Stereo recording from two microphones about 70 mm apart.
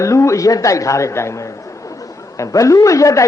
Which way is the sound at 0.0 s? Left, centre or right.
Left.